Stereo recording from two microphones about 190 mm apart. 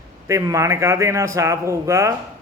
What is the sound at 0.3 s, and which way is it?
A man's voice, 15° right (ahead or behind).